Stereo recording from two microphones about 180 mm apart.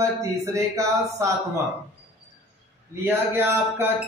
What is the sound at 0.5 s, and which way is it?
Speech, 15° right (ahead or behind).